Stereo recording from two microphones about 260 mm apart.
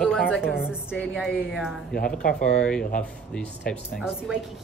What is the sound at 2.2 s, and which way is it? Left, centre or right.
Speech, left.